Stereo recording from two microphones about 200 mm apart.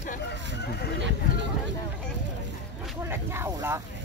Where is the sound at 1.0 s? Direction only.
65° right (ahead or behind).